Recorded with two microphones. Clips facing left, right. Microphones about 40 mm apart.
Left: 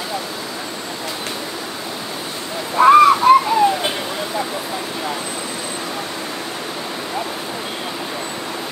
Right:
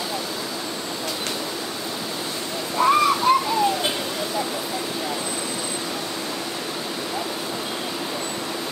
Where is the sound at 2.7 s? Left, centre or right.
Left.